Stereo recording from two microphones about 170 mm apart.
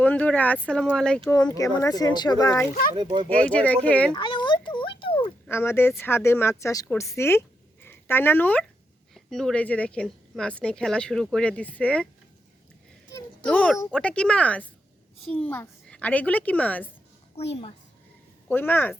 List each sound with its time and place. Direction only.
0.0 s speech: 10° left (ahead or behind)
1.5 s speech: 20° left (ahead or behind)
2.9 s speech: 25° right (ahead or behind)
3.2 s a woman's voice: 10° left (ahead or behind)
4.1 s a sound: 30° left (ahead or behind)
5.5 s a woman's voice: 15° left (ahead or behind)
13.4 s a woman's voice: 10° left (ahead or behind)
18.4 s a woman's voice: 10° left (ahead or behind)